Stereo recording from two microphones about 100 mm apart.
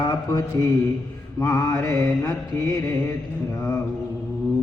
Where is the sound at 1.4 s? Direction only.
30° left (ahead or behind).